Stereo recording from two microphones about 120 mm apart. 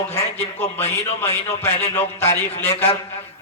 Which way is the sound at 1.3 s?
60° left (ahead or behind).